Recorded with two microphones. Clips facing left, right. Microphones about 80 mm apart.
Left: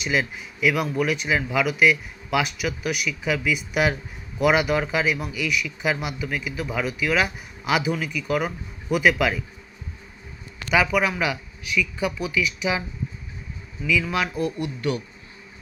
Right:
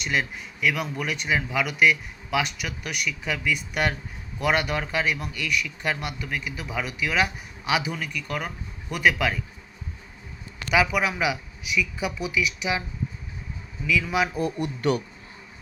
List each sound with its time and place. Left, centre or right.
0.0 s a man's voice: centre
10.7 s speech: centre
13.8 s a man's voice: centre
14.6 s speech: right